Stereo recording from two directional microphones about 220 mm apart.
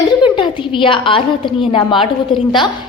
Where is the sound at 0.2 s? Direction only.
20° left (ahead or behind).